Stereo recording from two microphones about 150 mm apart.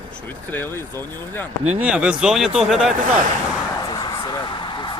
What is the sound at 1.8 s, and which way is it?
Speech, 10° right (ahead or behind).